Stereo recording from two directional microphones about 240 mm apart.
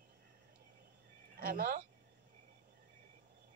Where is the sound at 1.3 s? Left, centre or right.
Right.